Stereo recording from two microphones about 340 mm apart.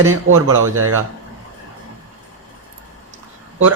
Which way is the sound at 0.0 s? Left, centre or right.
Right.